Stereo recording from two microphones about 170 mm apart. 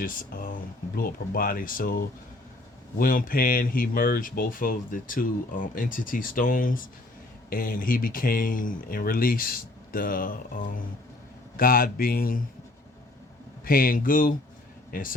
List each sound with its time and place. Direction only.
0.0 s speech: 55° left (ahead or behind)
13.7 s speech: 55° left (ahead or behind)